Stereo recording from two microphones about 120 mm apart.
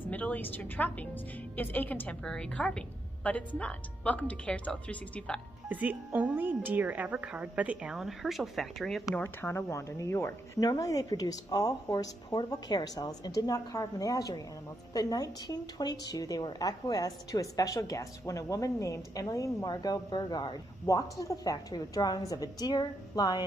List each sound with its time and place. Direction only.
0.1 s a woman's voice: 15° left (ahead or behind)
5.7 s speech: 15° right (ahead or behind); by 9.1 s centre (ahead or behind)
9.1 s speech: 20° left (ahead or behind); by 23.4 s 35° left (ahead or behind)